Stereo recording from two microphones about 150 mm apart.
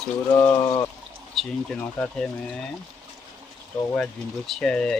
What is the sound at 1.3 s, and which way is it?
Speech, centre (ahead or behind).